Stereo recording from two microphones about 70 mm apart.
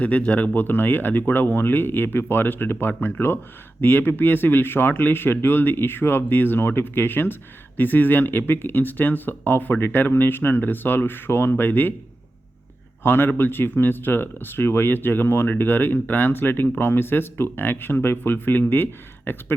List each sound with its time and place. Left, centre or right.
0.0 s speech: centre
13.0 s speech: left